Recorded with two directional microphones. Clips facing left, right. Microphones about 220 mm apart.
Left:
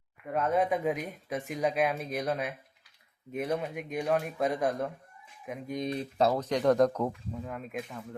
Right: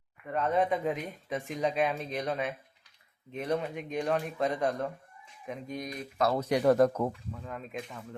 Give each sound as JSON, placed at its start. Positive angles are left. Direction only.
{"t": 0.3, "sound": "speech", "side_deg": 5}
{"t": 5.8, "sound": "speech", "side_deg": 30}
{"t": 6.4, "sound": "speech", "side_deg": -10}